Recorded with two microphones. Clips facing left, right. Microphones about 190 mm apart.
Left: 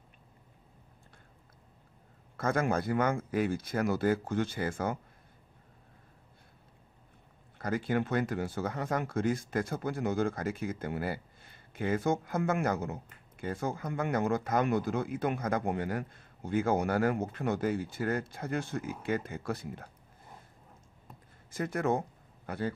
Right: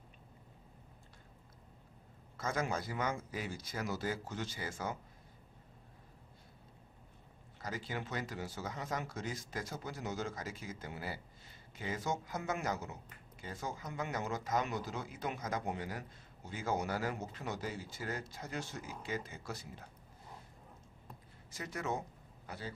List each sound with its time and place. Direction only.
2.3 s speech: 55° left (ahead or behind)
7.5 s speech: 55° left (ahead or behind)
21.5 s speech: 55° left (ahead or behind)